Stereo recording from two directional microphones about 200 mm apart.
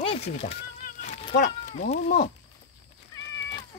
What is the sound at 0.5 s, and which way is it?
Music, 40° left (ahead or behind).